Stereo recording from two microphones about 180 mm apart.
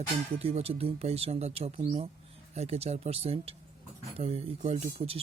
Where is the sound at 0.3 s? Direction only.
35° right (ahead or behind).